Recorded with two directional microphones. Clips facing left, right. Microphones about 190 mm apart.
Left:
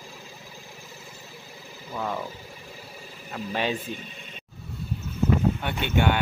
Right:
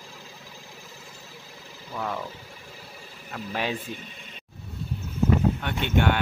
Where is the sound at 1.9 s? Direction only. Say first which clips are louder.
Left 1 dB; 5° left (ahead or behind).